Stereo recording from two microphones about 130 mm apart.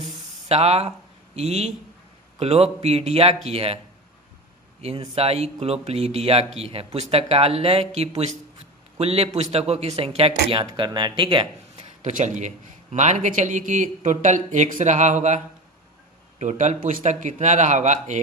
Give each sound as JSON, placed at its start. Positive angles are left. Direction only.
{"t": 0.4, "sound": "speech", "side_deg": -50}
{"t": 4.8, "sound": "speech", "side_deg": -50}
{"t": 10.7, "sound": "speech", "side_deg": -35}
{"t": 11.8, "sound": "a man's voice", "side_deg": -65}
{"t": 16.4, "sound": "a man's voice", "side_deg": -65}